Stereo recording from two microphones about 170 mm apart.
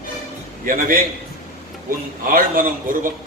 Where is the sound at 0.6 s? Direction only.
55° right (ahead or behind).